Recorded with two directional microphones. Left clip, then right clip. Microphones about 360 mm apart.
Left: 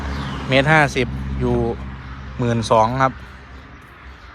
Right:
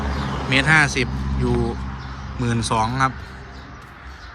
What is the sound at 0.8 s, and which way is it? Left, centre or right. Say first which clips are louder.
A man's voice: left 1 dB; centre.